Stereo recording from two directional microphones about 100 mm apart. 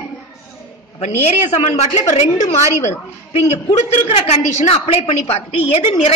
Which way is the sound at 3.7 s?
90° left.